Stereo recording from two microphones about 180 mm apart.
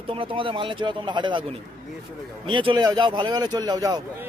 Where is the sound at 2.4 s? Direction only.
25° right (ahead or behind).